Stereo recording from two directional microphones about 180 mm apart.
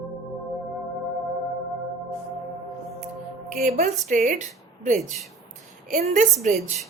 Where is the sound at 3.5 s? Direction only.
40° right (ahead or behind).